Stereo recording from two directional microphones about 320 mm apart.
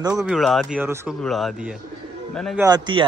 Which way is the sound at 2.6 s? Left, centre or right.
Centre.